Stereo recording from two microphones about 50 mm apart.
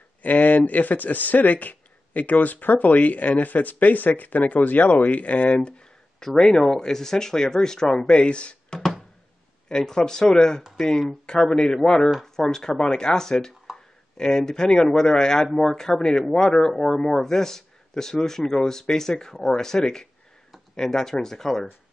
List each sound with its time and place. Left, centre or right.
0.2 s speech: left
8.7 s a sound: centre
9.7 s speech: centre